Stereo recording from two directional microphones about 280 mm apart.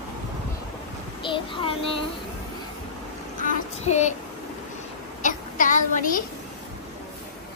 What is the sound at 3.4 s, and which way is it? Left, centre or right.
Child singing, left.